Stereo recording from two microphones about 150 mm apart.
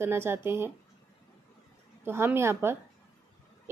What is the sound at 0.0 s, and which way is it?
Speech, 15° right (ahead or behind).